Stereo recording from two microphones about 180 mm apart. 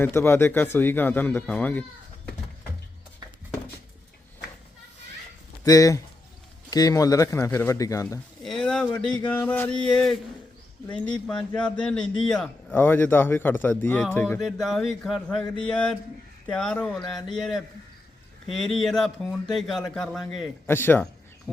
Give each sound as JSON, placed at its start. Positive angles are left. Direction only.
{"t": 0.0, "sound": "speech", "side_deg": 15}
{"t": 5.6, "sound": "speech", "side_deg": 20}
{"t": 8.4, "sound": "a sound", "side_deg": 5}
{"t": 9.0, "sound": "speech", "side_deg": 10}
{"t": 11.3, "sound": "a man's voice", "side_deg": 5}
{"t": 20.7, "sound": "speech", "side_deg": 15}